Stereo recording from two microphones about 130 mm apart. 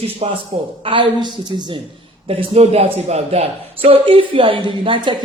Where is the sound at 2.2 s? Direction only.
50° right (ahead or behind).